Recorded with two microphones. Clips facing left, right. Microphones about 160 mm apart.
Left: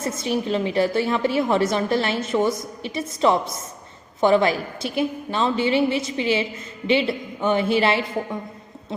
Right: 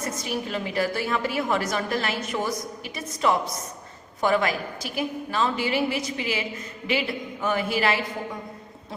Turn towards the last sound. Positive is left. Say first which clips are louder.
# left 5 dB
turn(degrees=25)  # may be behind; listen again after turning